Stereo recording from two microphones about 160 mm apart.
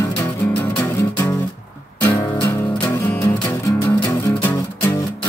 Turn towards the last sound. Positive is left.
turn(degrees=15)  # may be behind; listen again after turning